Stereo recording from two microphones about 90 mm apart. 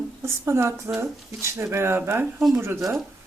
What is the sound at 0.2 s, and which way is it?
Speech, 30° right (ahead or behind).